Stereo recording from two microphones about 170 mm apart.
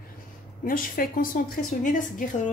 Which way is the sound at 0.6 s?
55° left (ahead or behind).